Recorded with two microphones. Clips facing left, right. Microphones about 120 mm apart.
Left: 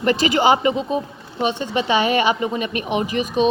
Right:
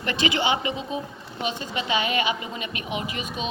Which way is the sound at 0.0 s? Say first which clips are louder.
Left 8 dB; 40° left (ahead or behind).